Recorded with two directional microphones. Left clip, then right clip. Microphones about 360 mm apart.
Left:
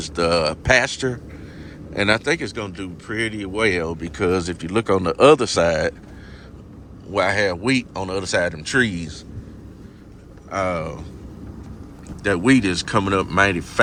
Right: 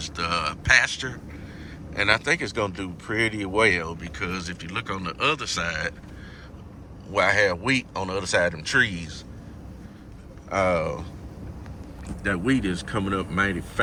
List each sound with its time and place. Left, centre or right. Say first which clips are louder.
0.0 s speech: left 7 dB; centre
7.1 s speech: left 1 dB; centre
10.5 s speech: right 1 dB; centre
12.2 s speech: left 7 dB; centre